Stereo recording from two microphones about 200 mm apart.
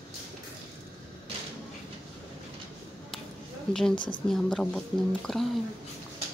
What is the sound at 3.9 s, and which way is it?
Speech, 25° left (ahead or behind).